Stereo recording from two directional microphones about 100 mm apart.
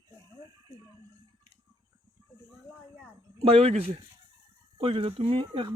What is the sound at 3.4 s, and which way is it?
Speech, 85° right.